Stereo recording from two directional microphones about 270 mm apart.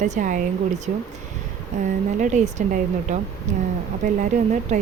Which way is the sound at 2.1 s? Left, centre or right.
Right.